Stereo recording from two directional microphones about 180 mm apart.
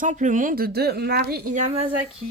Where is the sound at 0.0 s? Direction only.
45° right (ahead or behind); by 1.4 s 60° right (ahead or behind).